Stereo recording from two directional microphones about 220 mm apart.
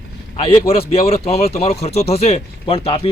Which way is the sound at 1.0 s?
25° left (ahead or behind).